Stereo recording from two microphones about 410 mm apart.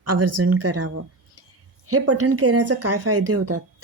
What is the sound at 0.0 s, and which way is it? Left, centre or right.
Speech, right.